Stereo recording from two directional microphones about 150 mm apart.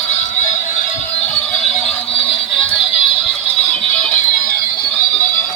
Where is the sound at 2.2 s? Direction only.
10° left (ahead or behind).